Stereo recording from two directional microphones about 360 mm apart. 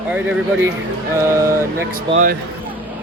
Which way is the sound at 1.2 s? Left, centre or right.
Centre.